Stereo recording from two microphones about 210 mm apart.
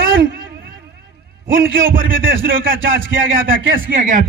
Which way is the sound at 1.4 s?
45° right (ahead or behind).